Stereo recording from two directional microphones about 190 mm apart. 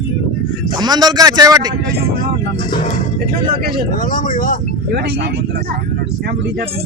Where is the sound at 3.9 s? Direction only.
45° left (ahead or behind).